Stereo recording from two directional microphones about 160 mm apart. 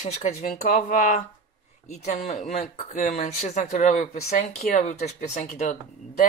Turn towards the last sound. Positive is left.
turn(degrees=55)  # may be behind; listen again after turning